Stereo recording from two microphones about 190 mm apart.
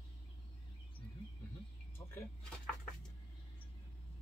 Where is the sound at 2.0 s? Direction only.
15° left (ahead or behind).